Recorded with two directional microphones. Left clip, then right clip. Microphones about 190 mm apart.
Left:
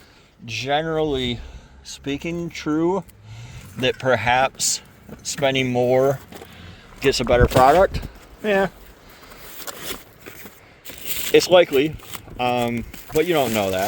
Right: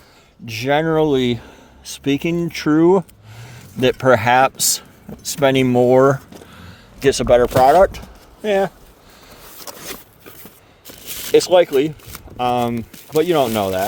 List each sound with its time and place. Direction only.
0.6 s speech: 60° right (ahead or behind); by 3.0 s 80° right
3.4 s speech: 65° right (ahead or behind)
5.4 s speech: 55° right (ahead or behind)
7.0 s speech: 30° right (ahead or behind)
11.3 s speech: 20° right (ahead or behind)
12.4 s speech: 30° right (ahead or behind)